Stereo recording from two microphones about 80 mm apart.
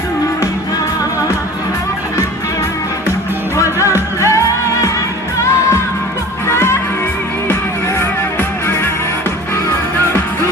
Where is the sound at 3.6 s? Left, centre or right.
Left.